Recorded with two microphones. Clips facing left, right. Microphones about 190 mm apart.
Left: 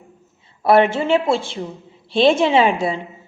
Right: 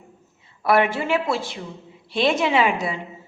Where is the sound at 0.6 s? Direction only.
25° left (ahead or behind).